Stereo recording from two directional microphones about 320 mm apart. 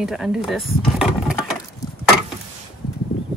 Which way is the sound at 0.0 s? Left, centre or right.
Centre.